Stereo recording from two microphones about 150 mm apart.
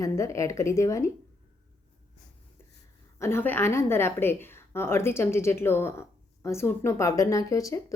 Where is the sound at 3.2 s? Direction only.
15° left (ahead or behind).